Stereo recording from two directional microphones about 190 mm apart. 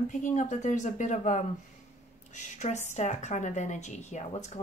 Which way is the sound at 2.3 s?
40° left (ahead or behind).